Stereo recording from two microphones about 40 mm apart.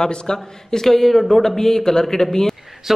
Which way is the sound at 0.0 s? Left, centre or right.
Centre.